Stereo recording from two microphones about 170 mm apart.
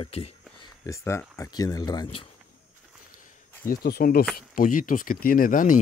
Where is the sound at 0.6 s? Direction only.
20° left (ahead or behind).